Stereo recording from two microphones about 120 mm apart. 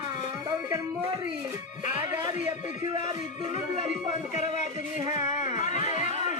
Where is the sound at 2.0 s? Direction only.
30° right (ahead or behind).